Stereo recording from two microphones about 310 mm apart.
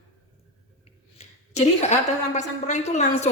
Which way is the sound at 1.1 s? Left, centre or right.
Left.